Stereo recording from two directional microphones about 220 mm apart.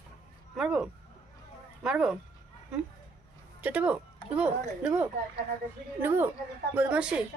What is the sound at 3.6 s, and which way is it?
Speech, 5° right (ahead or behind).